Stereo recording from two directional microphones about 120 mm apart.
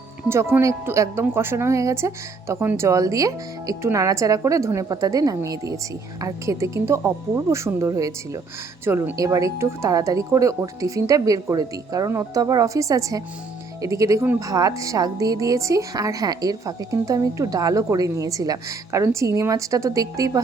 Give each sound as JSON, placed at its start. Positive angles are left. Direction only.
{"t": 0.3, "sound": "a woman's voice", "side_deg": -20}